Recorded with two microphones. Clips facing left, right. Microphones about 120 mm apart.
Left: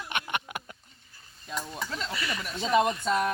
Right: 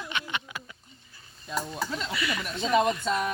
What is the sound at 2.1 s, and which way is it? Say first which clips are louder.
Speech: right 3 dB; 40° left (ahead or behind).